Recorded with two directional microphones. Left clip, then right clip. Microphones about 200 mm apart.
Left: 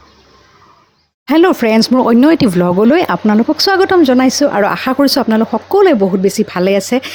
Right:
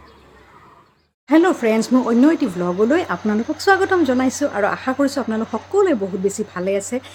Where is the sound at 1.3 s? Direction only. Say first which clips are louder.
Left 5 dB; 45° left (ahead or behind).